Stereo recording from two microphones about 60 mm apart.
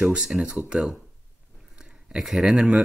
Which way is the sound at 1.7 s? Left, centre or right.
Centre.